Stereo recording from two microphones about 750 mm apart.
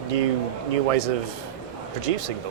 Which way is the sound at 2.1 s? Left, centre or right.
Right.